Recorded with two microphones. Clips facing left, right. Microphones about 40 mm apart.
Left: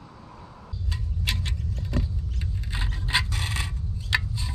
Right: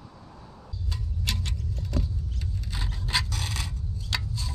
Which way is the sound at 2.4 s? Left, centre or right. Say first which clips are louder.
Left 4 dB; left.